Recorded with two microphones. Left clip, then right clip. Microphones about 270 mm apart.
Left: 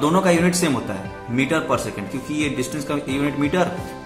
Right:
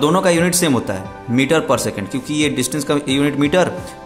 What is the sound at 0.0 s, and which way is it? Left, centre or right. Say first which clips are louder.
Speech: right 3 dB; right.